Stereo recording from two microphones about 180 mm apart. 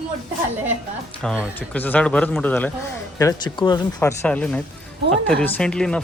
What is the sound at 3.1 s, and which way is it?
Speech, 20° left (ahead or behind).